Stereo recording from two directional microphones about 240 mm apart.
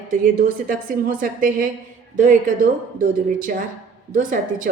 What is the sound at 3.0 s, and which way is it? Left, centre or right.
A woman's voice, right.